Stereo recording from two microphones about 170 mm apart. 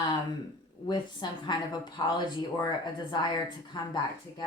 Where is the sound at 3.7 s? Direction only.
25° left (ahead or behind).